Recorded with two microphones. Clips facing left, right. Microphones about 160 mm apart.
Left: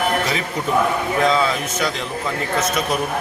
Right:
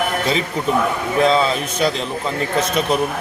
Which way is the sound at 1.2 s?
30° right (ahead or behind).